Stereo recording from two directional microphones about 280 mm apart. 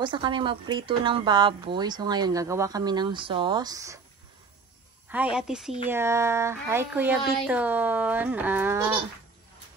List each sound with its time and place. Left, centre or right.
0.0 s speech: centre
5.1 s a woman's voice: centre